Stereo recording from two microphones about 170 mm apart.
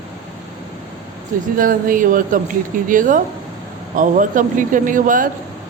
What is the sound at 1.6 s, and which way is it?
A man's voice, 55° right (ahead or behind).